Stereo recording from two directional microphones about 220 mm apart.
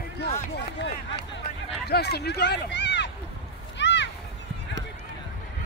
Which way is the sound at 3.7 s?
55° left (ahead or behind).